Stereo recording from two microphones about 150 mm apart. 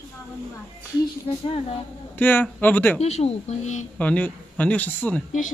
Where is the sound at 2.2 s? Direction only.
15° left (ahead or behind).